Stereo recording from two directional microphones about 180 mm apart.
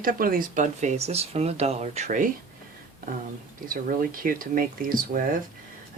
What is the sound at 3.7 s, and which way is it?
Speech, 50° right (ahead or behind).